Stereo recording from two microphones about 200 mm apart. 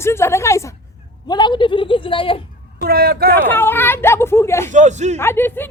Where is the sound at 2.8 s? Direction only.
50° right (ahead or behind).